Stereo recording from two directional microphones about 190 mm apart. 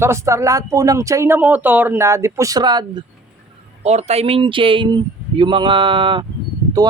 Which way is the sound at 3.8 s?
35° right (ahead or behind).